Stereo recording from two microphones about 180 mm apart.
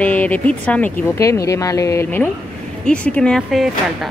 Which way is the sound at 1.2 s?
15° left (ahead or behind).